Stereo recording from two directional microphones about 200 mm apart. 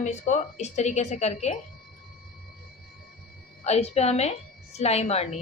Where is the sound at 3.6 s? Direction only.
30° left (ahead or behind).